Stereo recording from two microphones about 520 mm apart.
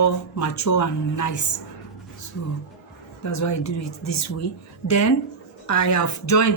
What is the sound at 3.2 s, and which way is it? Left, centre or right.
Speech, left.